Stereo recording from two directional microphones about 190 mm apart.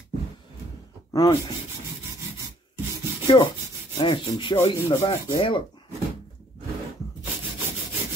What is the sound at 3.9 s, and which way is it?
Rub, 25° left (ahead or behind).